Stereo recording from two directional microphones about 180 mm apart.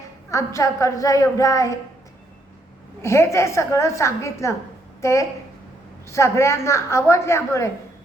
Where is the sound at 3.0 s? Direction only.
15° left (ahead or behind).